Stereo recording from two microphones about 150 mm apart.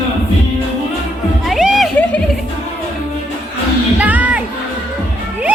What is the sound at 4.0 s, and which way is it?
Music, 10° right (ahead or behind).